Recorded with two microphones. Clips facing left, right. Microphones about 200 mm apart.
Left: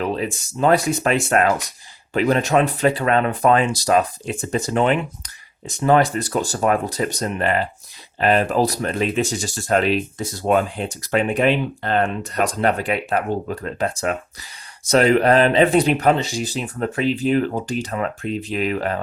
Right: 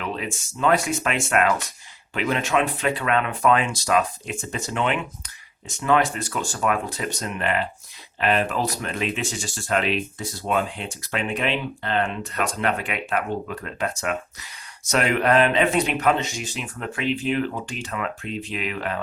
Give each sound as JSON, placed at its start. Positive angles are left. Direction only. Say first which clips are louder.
{"t": 0.0, "sound": "speech", "louder": "left 6 dB", "side_deg": 35}